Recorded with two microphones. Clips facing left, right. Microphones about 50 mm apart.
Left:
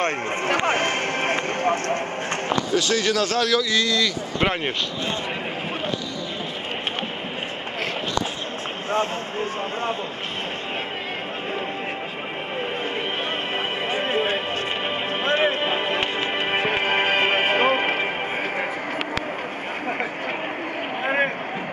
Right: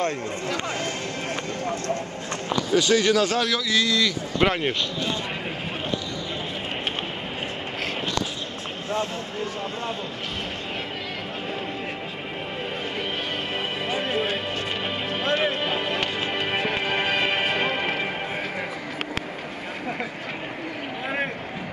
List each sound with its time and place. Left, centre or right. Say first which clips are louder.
0.0 s speech: left 3 dB; left
2.7 s speech: right 4 dB; centre
4.4 s speech: right 1 dB; left
8.9 s speech: left 4 dB; left
13.8 s music: left 2 dB; left
21.0 s a sound: left 6 dB; left